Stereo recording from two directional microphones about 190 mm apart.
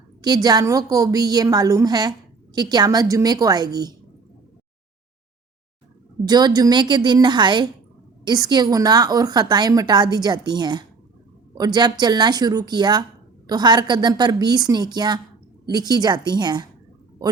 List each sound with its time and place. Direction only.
0.2 s a woman's voice: 20° right (ahead or behind)
6.2 s a woman's voice: 20° right (ahead or behind)